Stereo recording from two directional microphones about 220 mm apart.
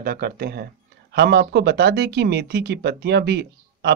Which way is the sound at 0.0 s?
45° right (ahead or behind).